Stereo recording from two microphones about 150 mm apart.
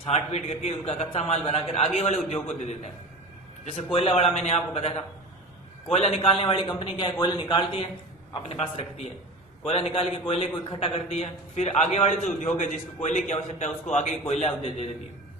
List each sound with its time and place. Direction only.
0.1 s a man's voice: 45° left (ahead or behind)
3.9 s a man's voice: 40° left (ahead or behind)